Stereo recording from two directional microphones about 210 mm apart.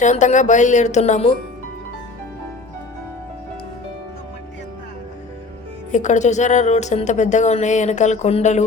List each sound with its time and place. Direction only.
0.0 s a woman's voice: 35° left (ahead or behind)
5.9 s a woman's voice: 35° left (ahead or behind)